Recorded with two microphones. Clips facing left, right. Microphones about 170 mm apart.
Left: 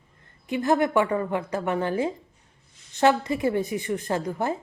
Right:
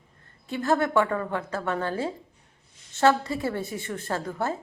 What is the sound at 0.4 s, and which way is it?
Speech, 15° left (ahead or behind).